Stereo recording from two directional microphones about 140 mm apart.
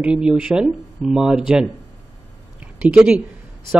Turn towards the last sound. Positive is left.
turn(degrees=-5)  # may be behind; listen again after turning